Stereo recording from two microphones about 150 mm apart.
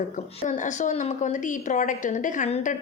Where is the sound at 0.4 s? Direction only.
55° left (ahead or behind).